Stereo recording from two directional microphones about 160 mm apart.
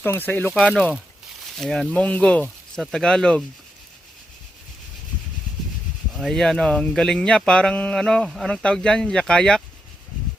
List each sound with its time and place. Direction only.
0.0 s speech: 10° left (ahead or behind)
0.5 s speech: centre (ahead or behind)
6.1 s speech: centre (ahead or behind)